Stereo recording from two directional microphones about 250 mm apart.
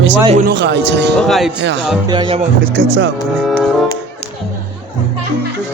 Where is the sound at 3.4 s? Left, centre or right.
Centre.